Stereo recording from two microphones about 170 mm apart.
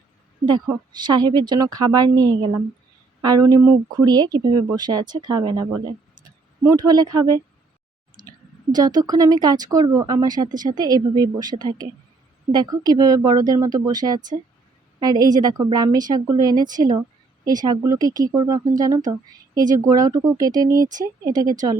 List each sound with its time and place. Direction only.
0.9 s speech: 25° right (ahead or behind)
8.2 s clicking: 25° right (ahead or behind)
8.7 s speech: 25° right (ahead or behind)